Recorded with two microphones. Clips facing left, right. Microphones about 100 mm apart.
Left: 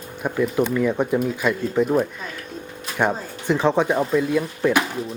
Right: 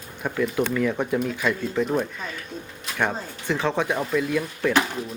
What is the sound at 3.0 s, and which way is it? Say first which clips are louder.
Speech: left 4 dB; 15° left (ahead or behind).